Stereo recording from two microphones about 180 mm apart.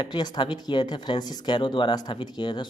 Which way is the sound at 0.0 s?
25° left (ahead or behind).